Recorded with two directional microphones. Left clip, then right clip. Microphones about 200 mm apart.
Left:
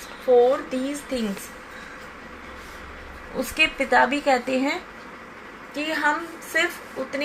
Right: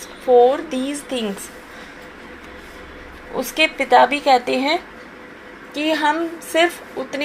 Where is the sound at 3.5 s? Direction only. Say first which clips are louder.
Right 5 dB; 35° right (ahead or behind).